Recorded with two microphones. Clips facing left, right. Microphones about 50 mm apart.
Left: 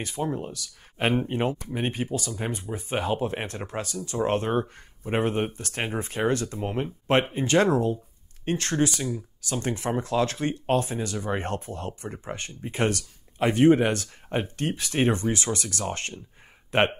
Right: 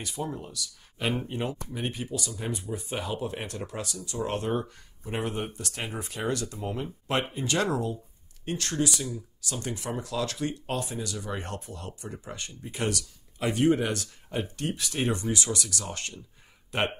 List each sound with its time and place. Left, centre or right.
0.0 s speech: left